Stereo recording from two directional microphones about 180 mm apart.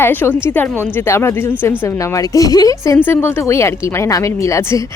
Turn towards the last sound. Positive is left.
turn(degrees=15)  # may be behind; listen again after turning